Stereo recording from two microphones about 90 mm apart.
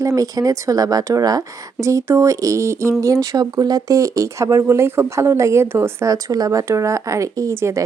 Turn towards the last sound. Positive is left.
turn(degrees=-35)  # may be behind; listen again after turning